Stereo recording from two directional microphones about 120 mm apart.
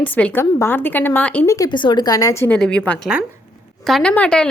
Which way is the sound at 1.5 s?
30° left (ahead or behind).